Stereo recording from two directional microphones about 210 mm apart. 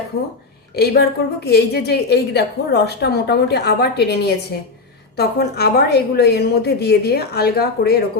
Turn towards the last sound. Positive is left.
turn(degrees=50)  # may be behind; listen again after turning